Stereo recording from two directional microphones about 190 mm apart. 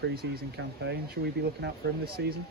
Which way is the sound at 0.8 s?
60° right (ahead or behind).